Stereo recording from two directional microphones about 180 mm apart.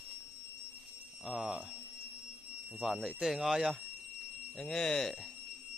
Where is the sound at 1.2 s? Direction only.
5° right (ahead or behind).